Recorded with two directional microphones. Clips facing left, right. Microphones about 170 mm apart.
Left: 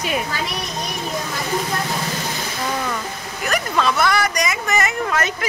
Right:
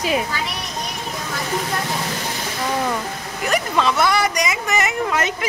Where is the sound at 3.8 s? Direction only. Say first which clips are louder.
Even; 20° right (ahead or behind).